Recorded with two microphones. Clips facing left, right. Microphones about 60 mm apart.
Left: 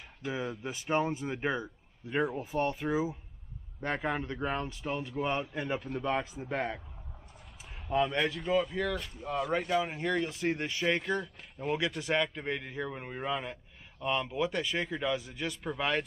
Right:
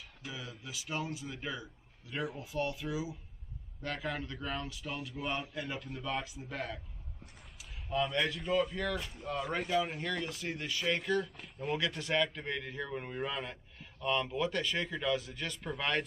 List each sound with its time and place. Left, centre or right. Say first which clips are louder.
0.3 s a man's voice: left 10 dB; left
3.8 s speech: left 5 dB; left
7.9 s speech: left 3 dB; left
8.3 s a man's voice: left 2 dB; centre; by 11.0 s left
11.3 s a man's voice: left 3 dB; centre